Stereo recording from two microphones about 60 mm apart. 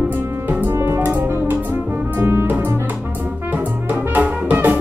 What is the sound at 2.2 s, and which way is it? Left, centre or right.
Music, right.